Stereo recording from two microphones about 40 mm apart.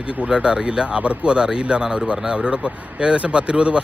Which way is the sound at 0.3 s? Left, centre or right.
Centre.